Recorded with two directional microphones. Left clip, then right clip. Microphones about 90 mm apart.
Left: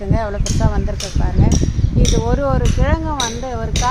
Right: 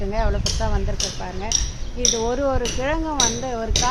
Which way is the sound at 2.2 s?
65° left (ahead or behind).